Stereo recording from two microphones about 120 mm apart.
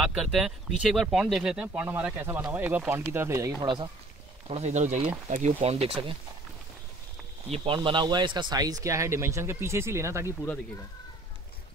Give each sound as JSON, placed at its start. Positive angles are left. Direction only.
{"t": 0.0, "sound": "speech", "side_deg": -5}
{"t": 3.6, "sound": "speech", "side_deg": -40}
{"t": 4.5, "sound": "speech", "side_deg": -65}
{"t": 7.5, "sound": "speech", "side_deg": -45}